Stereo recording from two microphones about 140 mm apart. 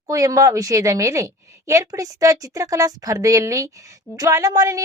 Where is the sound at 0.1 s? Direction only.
25° right (ahead or behind).